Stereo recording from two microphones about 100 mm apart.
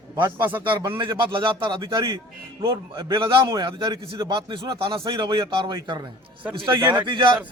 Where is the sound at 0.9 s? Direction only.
55° right (ahead or behind).